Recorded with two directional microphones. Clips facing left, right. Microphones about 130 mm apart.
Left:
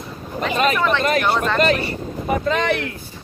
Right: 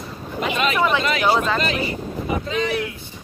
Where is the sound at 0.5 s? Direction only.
40° left (ahead or behind).